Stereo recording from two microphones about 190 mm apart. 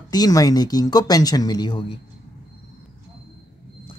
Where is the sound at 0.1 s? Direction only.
20° left (ahead or behind).